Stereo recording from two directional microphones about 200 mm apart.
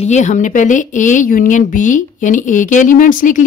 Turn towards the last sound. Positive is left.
turn(degrees=40)  # may be behind; listen again after turning